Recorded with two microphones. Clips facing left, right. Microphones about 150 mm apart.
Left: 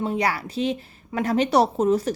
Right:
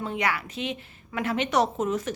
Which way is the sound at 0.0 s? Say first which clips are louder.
Left 4 dB; 35° left (ahead or behind).